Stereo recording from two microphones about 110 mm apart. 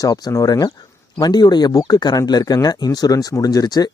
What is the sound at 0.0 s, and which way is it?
Speech, 30° left (ahead or behind).